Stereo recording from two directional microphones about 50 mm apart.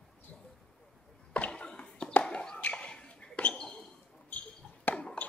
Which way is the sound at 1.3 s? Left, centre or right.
Left.